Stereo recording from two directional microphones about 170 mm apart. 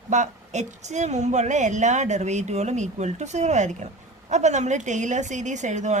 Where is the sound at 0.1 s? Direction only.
45° right (ahead or behind).